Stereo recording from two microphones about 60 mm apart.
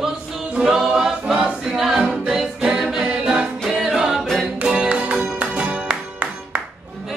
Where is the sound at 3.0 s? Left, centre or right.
Centre.